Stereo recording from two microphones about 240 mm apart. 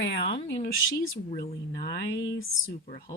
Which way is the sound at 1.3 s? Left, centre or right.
Left.